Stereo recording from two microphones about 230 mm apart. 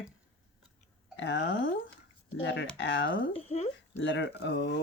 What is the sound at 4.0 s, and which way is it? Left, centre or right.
Speech, left.